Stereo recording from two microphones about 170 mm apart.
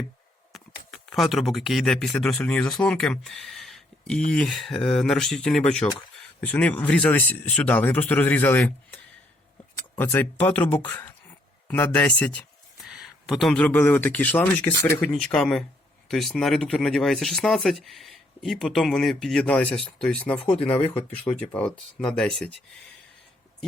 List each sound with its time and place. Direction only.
1.1 s speech: centre (ahead or behind)
10.0 s speech: 10° left (ahead or behind)
12.8 s speech: centre (ahead or behind)
20.6 s speech: 35° left (ahead or behind)
21.3 s speech: 5° left (ahead or behind)